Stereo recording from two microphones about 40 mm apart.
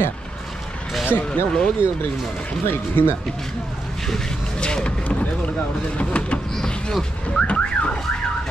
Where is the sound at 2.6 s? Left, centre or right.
Left.